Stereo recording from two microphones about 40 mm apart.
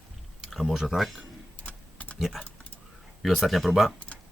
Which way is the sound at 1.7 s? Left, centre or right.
Left.